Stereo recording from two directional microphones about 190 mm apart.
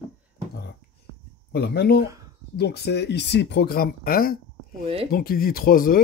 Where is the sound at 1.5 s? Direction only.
60° left (ahead or behind).